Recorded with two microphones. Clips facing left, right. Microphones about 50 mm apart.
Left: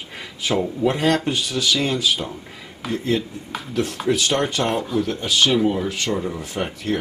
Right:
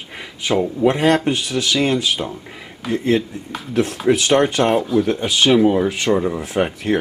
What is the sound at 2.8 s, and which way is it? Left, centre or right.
Speech, centre.